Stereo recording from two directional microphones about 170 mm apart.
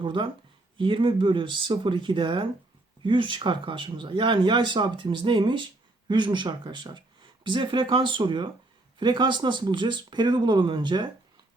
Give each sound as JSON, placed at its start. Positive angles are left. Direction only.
{"t": 0.0, "sound": "speech", "side_deg": -30}